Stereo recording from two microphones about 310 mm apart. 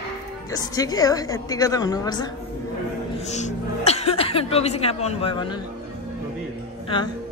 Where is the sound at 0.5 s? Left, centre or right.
Centre.